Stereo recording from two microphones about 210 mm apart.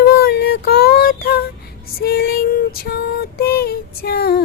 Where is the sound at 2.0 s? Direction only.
45° left (ahead or behind).